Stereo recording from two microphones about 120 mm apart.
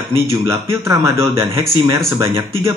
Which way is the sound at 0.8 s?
25° right (ahead or behind).